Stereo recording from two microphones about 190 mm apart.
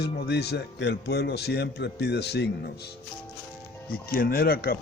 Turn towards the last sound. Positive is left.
turn(degrees=50)  # may be behind; listen again after turning